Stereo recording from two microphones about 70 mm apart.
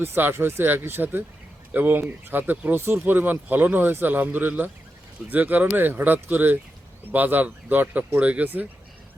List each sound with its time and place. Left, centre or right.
0.0 s speech: right